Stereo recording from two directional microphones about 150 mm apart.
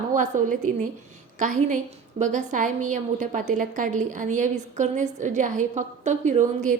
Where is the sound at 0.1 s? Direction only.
60° right (ahead or behind).